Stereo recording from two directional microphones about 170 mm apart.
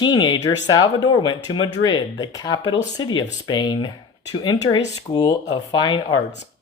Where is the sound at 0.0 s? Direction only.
25° left (ahead or behind).